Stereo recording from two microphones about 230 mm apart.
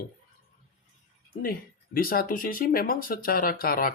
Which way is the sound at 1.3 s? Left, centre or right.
Left.